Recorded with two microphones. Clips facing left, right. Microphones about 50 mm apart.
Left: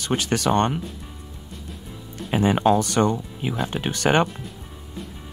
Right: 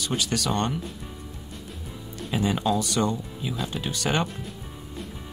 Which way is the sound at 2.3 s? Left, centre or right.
Left.